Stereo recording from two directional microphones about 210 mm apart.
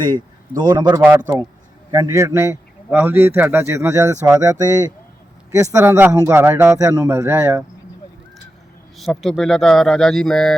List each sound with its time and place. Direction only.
0.0 s a man's voice: 20° right (ahead or behind)
9.0 s speech: centre (ahead or behind)